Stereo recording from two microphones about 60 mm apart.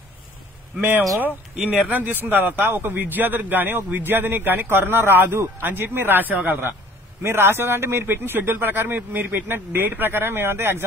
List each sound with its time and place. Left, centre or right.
0.7 s a man's voice: right